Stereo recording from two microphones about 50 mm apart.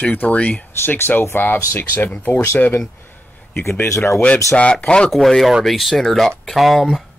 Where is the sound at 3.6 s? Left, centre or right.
Left.